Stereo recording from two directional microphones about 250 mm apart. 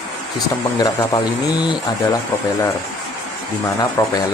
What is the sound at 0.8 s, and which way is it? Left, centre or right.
Speech, centre.